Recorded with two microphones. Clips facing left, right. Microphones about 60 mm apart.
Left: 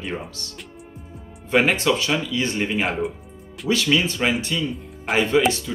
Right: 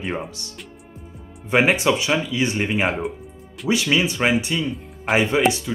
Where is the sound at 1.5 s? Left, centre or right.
Centre.